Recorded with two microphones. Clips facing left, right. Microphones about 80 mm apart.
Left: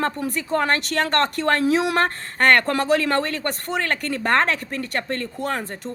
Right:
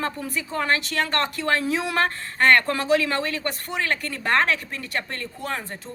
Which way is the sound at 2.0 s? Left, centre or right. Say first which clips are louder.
Left 1 dB; left.